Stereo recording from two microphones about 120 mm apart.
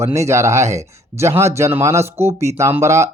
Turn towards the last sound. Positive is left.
turn(degrees=-25)  # may be behind; listen again after turning